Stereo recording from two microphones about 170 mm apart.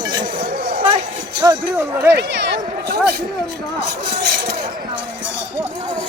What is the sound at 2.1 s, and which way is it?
Speech, 90° right.